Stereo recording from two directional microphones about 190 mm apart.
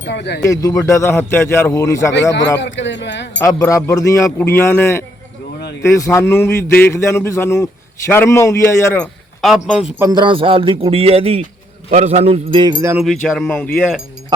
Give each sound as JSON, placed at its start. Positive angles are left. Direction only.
{"t": 0.0, "sound": "speech", "side_deg": 65}
{"t": 0.4, "sound": "a man's voice", "side_deg": 20}
{"t": 2.6, "sound": "speech", "side_deg": 70}
{"t": 3.4, "sound": "a man's voice", "side_deg": 15}
{"t": 9.4, "sound": "a sound", "side_deg": 0}
{"t": 10.0, "sound": "speech", "side_deg": -20}
{"t": 13.0, "sound": "a sound", "side_deg": 0}